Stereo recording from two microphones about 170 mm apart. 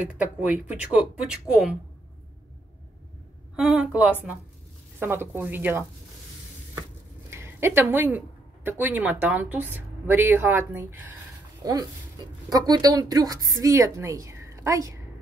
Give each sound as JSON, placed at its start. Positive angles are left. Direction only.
{"t": 0.2, "sound": "speech", "side_deg": -5}
{"t": 3.5, "sound": "speech", "side_deg": -5}
{"t": 7.2, "sound": "a sound", "side_deg": -15}
{"t": 8.6, "sound": "a woman's voice", "side_deg": -10}